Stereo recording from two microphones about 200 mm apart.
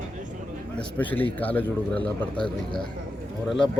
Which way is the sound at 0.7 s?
10° left (ahead or behind).